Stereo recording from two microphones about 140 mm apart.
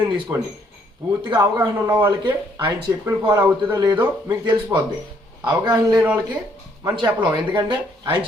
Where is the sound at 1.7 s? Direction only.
15° right (ahead or behind).